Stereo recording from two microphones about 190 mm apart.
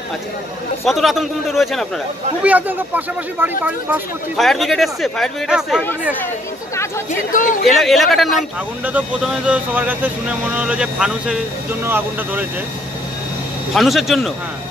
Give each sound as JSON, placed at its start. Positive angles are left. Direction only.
{"t": 0.8, "sound": "speech", "side_deg": 0}
{"t": 3.3, "sound": "speech", "side_deg": -10}
{"t": 4.4, "sound": "speech", "side_deg": 0}
{"t": 7.1, "sound": "speech", "side_deg": 45}
{"t": 7.6, "sound": "speech", "side_deg": 0}
{"t": 13.7, "sound": "speech", "side_deg": 0}